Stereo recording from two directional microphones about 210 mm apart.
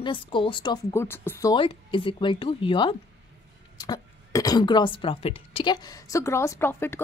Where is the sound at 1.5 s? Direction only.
25° left (ahead or behind).